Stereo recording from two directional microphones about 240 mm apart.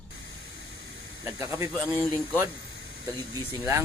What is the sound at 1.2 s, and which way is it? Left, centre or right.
Speech, centre.